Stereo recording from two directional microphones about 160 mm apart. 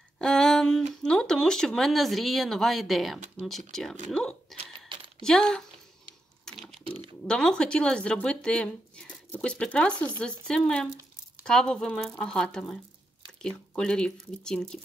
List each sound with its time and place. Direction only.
0.2 s a sound: 5° left (ahead or behind)
1.0 s speech: 5° left (ahead or behind)
4.6 s coin: 35° right (ahead or behind)
5.2 s speech: 5° left (ahead or behind)
6.4 s typing: centre (ahead or behind)
6.8 s typing: 35° right (ahead or behind)
7.2 s speech: 5° left (ahead or behind)